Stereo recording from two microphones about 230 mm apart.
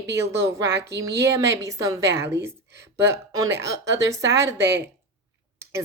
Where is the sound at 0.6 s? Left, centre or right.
Right.